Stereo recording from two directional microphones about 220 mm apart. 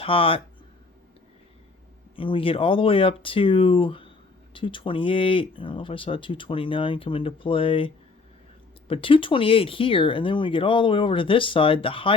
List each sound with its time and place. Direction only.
0.0 s speech: 25° left (ahead or behind)
2.1 s speech: 25° left (ahead or behind)